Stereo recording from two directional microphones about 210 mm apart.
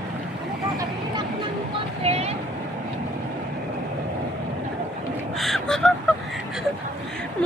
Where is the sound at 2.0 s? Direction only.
30° right (ahead or behind).